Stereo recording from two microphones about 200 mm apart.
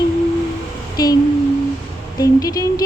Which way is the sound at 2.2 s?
20° left (ahead or behind).